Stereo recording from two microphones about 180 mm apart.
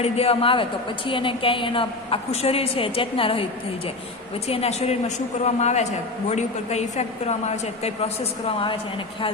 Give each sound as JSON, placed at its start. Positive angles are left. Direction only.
{"t": 0.0, "sound": "a woman's voice", "side_deg": 35}
{"t": 4.4, "sound": "a woman's voice", "side_deg": 35}